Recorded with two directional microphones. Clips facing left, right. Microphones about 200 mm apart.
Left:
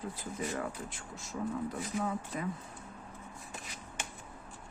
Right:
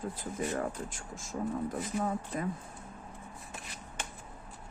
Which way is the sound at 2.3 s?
40° right (ahead or behind).